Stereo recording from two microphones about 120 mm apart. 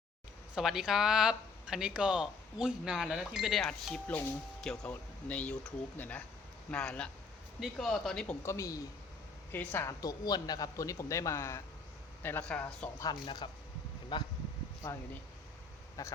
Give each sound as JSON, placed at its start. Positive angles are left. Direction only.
{"t": 0.5, "sound": "speech", "side_deg": -5}
{"t": 8.4, "sound": "speech", "side_deg": 25}
{"t": 10.0, "sound": "speech", "side_deg": 35}
{"t": 13.2, "sound": "speech", "side_deg": 40}
{"t": 16.0, "sound": "speech", "side_deg": 25}